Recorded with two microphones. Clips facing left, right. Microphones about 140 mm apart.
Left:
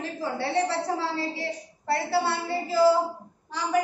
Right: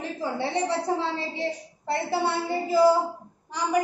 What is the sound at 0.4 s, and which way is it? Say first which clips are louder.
A woman's voice: left 1 dB; 20° right (ahead or behind).